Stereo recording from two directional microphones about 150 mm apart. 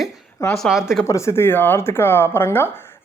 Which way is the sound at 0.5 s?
Centre (ahead or behind).